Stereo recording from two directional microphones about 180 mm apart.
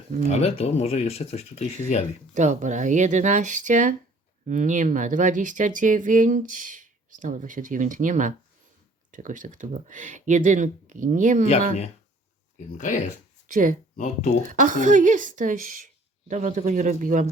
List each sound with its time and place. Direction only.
0.3 s speech: 35° left (ahead or behind)
2.3 s speech: 40° right (ahead or behind)
12.5 s speech: 40° left (ahead or behind)
13.5 s speech: 45° right (ahead or behind)
13.9 s speech: 40° left (ahead or behind)
14.4 s speech: 45° right (ahead or behind)